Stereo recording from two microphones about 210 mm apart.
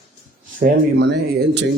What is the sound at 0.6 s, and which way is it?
A man's voice, 50° right (ahead or behind).